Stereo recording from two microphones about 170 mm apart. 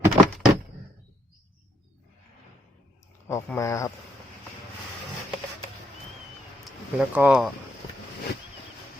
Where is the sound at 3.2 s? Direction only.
15° left (ahead or behind).